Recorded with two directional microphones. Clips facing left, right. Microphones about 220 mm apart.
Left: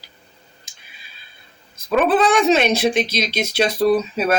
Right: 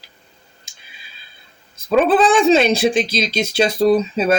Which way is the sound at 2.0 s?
30° right (ahead or behind).